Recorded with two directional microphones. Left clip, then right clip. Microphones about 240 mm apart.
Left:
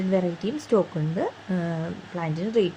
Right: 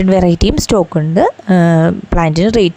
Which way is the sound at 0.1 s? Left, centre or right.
Right.